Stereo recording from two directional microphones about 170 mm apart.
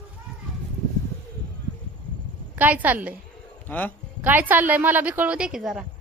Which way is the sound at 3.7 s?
10° left (ahead or behind).